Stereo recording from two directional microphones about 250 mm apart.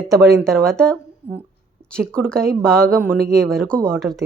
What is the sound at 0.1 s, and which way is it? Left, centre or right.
Speech, centre.